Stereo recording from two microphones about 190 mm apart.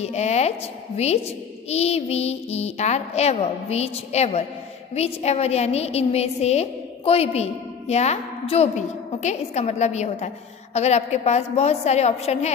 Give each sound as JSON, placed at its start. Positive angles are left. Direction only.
{"t": 0.0, "sound": "a woman's voice", "side_deg": 35}